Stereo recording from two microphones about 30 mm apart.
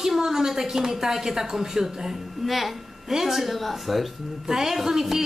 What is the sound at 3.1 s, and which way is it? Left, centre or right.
Speech, centre.